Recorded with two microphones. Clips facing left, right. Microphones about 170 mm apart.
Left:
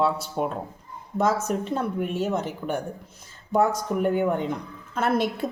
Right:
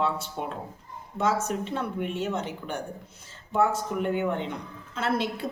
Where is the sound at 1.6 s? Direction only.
40° left (ahead or behind).